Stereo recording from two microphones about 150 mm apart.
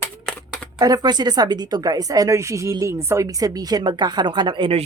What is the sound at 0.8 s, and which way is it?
Speech, 25° right (ahead or behind).